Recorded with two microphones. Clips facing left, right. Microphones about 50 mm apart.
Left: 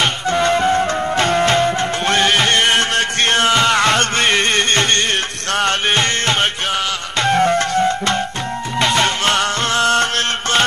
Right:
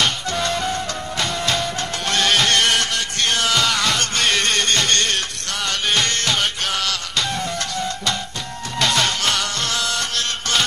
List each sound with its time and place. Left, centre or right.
0.0 s music: left
7.2 s music: left
8.7 s music: left